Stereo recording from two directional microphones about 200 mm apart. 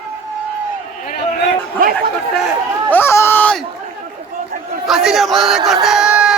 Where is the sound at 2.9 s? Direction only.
10° left (ahead or behind).